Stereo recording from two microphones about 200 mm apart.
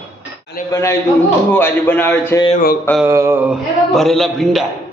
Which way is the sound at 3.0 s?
10° right (ahead or behind).